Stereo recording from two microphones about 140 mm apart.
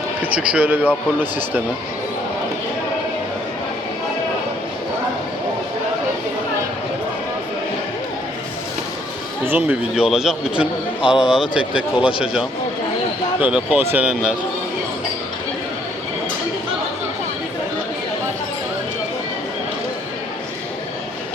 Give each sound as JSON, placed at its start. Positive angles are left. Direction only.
{"t": 0.2, "sound": "a man's voice", "side_deg": -10}
{"t": 9.5, "sound": "a man's voice", "side_deg": -15}
{"t": 9.9, "sound": "a man's voice", "side_deg": -5}
{"t": 13.5, "sound": "a man's voice", "side_deg": -10}